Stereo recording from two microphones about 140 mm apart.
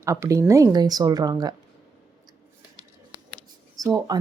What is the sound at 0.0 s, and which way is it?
Speech, 20° right (ahead or behind).